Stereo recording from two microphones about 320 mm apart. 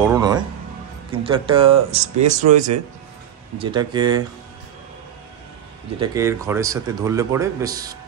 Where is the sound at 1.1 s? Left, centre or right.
Centre.